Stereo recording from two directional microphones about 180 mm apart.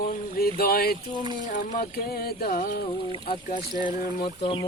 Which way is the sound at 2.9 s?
25° left (ahead or behind).